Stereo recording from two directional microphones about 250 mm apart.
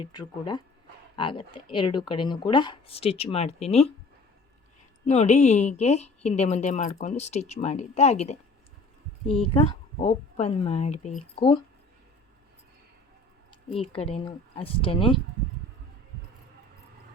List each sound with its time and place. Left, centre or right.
0.0 s speech: centre
5.0 s speech: left
13.8 s speech: left